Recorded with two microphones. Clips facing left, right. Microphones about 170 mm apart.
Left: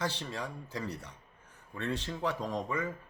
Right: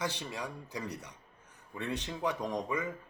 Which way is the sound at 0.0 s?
15° right (ahead or behind).